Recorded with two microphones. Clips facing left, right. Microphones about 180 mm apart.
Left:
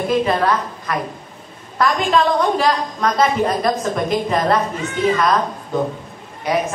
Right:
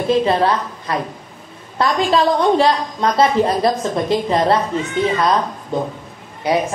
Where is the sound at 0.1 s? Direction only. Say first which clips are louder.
Right 3 dB; 30° right (ahead or behind).